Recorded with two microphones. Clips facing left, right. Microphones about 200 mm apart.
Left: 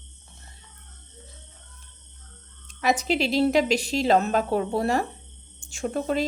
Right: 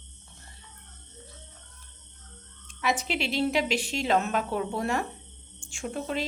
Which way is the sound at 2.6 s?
40° left (ahead or behind).